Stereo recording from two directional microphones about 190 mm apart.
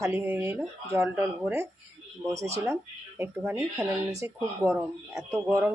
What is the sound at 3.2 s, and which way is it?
Speech, 15° right (ahead or behind).